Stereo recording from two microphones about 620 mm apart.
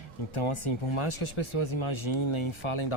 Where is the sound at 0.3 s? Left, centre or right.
Left.